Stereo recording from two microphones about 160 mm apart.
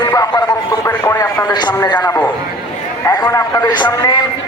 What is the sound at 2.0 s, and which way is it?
Speech, 15° left (ahead or behind).